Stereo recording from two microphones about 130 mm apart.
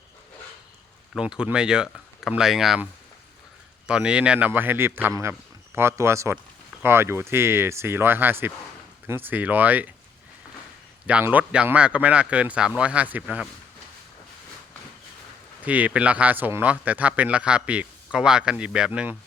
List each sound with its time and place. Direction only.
1.1 s speech: 5° right (ahead or behind)
3.8 s speech: 10° right (ahead or behind)
11.0 s speech: 10° right (ahead or behind)
15.6 s speech: 10° right (ahead or behind)